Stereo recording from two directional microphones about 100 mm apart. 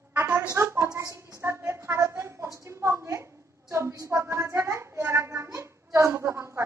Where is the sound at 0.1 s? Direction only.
15° right (ahead or behind).